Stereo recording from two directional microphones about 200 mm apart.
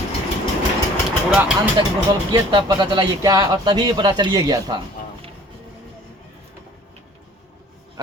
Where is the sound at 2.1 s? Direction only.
20° right (ahead or behind).